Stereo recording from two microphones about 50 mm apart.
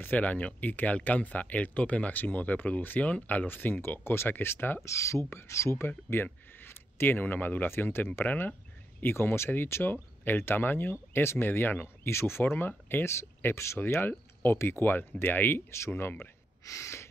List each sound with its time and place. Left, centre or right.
0.0 s speech: left
3.8 s speech: left
4.8 s speech: left
6.2 s speech: left
9.0 s speech: left
10.2 s speech: left
12.1 s speech: left
12.5 s speech: left
16.6 s gasp: left